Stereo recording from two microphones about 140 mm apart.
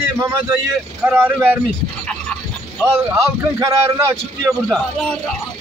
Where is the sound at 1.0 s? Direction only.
15° right (ahead or behind).